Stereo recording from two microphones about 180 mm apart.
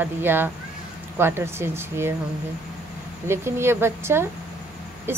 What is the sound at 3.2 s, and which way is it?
Speech, 15° right (ahead or behind).